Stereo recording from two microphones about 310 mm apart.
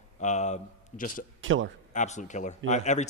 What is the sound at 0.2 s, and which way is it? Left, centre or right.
Speech, left.